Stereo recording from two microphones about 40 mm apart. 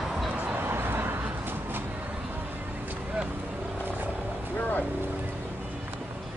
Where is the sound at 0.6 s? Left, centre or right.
Right.